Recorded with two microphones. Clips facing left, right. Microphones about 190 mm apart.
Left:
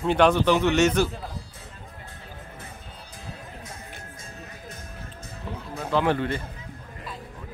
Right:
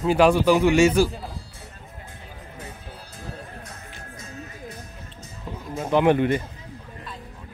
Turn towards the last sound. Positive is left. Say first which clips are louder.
# right 5 dB
turn(degrees=-15)  # may be behind; listen again after turning